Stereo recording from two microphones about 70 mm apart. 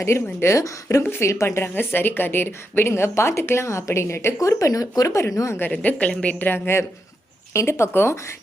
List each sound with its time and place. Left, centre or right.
0.0 s speech: left
1.0 s a woman's voice: left
1.3 s a woman's voice: left
4.4 s speech: left
5.7 s a woman's voice: left
6.4 s a woman's voice: left